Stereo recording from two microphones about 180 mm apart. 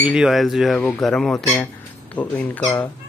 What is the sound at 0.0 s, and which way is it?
Speech, 5° right (ahead or behind).